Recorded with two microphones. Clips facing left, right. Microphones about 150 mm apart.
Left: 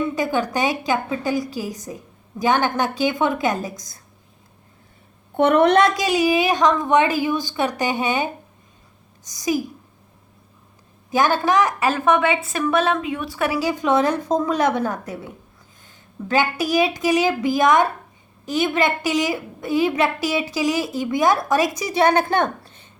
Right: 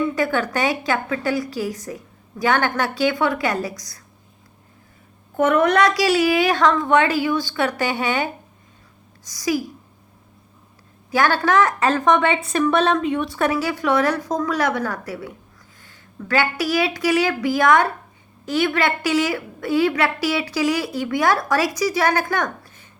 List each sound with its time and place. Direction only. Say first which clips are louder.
0.2 s a woman's voice: even; 15° left (ahead or behind)
5.4 s a woman's voice: left 2 dB; 30° left (ahead or behind)
11.1 s a woman's voice: even; 15° left (ahead or behind)